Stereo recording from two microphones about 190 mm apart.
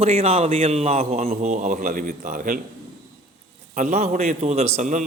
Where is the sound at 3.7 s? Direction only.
40° right (ahead or behind).